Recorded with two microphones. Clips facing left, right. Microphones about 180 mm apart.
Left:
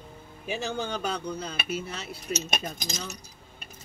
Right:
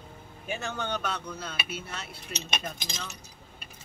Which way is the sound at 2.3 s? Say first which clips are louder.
Left 3 dB; 40° left (ahead or behind).